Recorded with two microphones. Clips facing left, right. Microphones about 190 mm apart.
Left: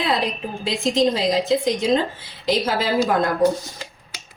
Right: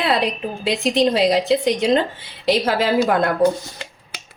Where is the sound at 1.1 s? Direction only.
65° right (ahead or behind).